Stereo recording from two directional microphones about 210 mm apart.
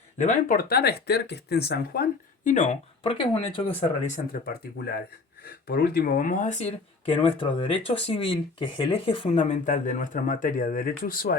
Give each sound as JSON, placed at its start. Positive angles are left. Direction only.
{"t": 0.2, "sound": "speech", "side_deg": 35}
{"t": 4.3, "sound": "speech", "side_deg": 45}